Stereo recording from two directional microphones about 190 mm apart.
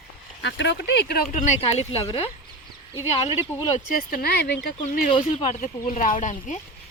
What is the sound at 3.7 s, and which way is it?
Speech, 50° left (ahead or behind).